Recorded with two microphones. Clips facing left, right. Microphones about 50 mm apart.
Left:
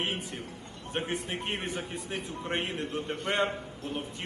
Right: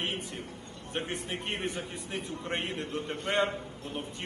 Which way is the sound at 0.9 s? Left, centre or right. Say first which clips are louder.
Left 2 dB; left.